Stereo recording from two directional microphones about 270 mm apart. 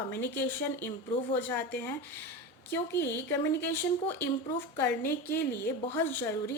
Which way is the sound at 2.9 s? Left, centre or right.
Left.